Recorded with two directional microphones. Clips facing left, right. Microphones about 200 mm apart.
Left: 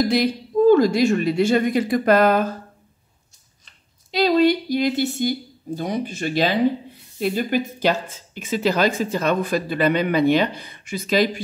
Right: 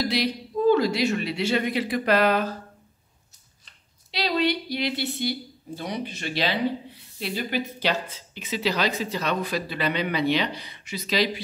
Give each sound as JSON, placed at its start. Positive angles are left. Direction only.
{"t": 0.0, "sound": "a woman's voice", "side_deg": 50}
{"t": 4.1, "sound": "a woman's voice", "side_deg": 45}